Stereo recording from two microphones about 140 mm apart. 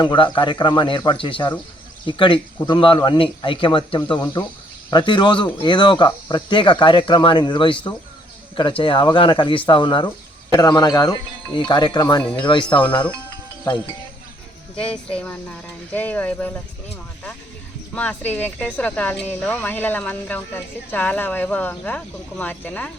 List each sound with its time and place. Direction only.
0.0 s speech: 35° left (ahead or behind)
14.8 s speech: 10° left (ahead or behind)
17.9 s speech: 10° left (ahead or behind)